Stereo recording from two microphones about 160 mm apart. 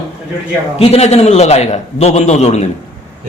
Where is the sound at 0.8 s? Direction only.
40° left (ahead or behind).